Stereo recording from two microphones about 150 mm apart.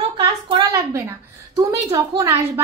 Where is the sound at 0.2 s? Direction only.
25° right (ahead or behind).